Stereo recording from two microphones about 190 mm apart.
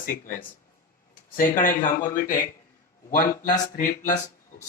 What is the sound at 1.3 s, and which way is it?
A man's voice, 45° left (ahead or behind).